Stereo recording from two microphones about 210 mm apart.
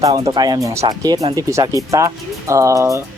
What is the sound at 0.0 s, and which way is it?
Speech, 20° right (ahead or behind).